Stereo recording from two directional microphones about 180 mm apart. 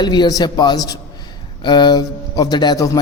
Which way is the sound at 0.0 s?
25° left (ahead or behind).